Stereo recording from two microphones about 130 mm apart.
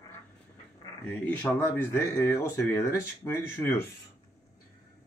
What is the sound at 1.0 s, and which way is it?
Speech, 10° left (ahead or behind).